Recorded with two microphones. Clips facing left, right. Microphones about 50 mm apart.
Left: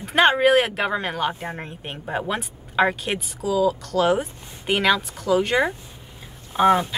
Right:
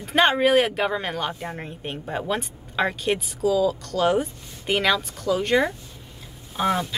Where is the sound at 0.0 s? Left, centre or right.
Centre.